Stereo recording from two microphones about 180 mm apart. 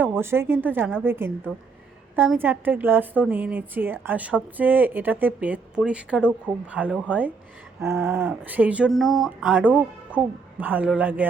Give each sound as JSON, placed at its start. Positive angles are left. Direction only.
{"t": 0.0, "sound": "a woman's voice", "side_deg": -15}